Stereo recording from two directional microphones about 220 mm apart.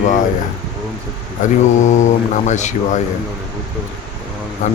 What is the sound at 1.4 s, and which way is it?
A man's voice, 35° left (ahead or behind).